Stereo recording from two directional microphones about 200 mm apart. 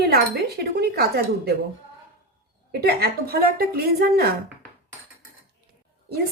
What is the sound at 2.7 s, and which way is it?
Speech, 50° right (ahead or behind).